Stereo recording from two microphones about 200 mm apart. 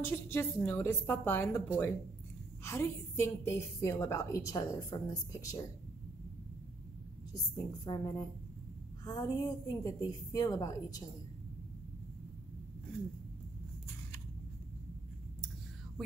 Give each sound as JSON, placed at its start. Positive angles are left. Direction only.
{"t": 0.0, "sound": "a woman's voice", "side_deg": 10}
{"t": 7.5, "sound": "a woman's voice", "side_deg": 20}